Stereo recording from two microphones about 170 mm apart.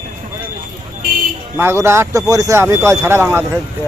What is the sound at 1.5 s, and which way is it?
Speech, 15° right (ahead or behind).